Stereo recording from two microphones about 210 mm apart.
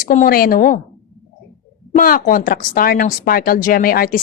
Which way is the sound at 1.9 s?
40° left (ahead or behind).